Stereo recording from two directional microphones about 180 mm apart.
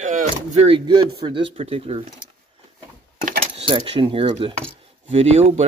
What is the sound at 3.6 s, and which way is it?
Speech, 30° right (ahead or behind).